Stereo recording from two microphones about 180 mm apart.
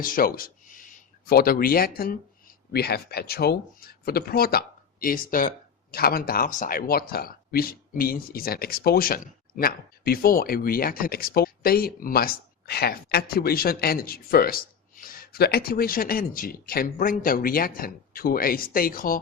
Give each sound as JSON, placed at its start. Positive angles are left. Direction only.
{"t": 0.0, "sound": "speech", "side_deg": 50}